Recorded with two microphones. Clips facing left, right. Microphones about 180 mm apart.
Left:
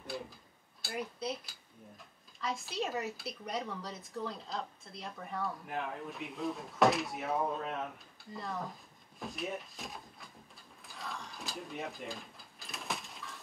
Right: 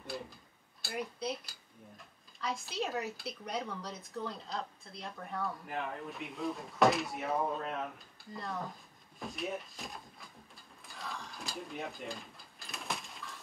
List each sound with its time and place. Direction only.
0.0 s a sound: centre (ahead or behind)
0.8 s speech: centre (ahead or behind)
9.2 s drawer open or close: centre (ahead or behind)